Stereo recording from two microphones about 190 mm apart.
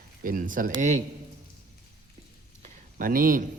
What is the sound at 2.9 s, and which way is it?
Speech, 45° right (ahead or behind).